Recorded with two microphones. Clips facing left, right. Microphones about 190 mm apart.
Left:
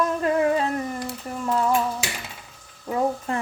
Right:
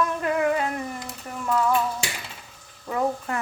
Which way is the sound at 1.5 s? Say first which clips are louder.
Even; 25° left (ahead or behind).